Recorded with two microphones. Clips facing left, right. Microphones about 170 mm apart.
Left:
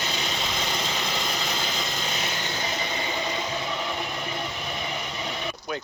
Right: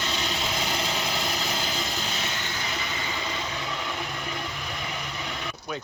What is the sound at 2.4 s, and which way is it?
Vehicle, 25° left (ahead or behind).